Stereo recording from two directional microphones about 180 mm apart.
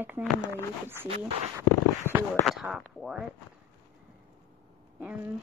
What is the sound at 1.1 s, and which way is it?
Speech, 35° right (ahead or behind).